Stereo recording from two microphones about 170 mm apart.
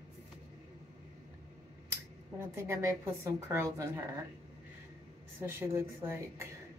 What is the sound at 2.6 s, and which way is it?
A woman's voice, 15° right (ahead or behind).